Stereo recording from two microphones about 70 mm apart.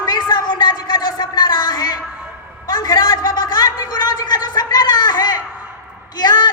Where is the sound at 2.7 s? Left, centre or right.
Left.